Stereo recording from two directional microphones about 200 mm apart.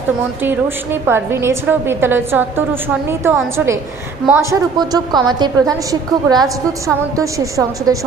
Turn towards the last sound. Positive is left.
turn(degrees=-15)  # may be behind; listen again after turning